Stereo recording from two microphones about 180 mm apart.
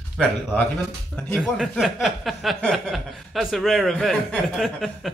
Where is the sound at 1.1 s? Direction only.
Centre (ahead or behind).